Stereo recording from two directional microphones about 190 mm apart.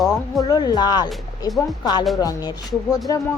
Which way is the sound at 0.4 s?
20° left (ahead or behind).